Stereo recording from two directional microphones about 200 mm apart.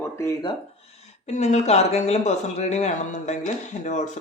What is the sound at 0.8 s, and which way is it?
Speech, 30° left (ahead or behind).